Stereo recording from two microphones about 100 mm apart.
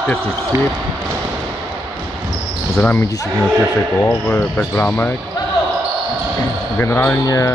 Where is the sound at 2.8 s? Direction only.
20° left (ahead or behind).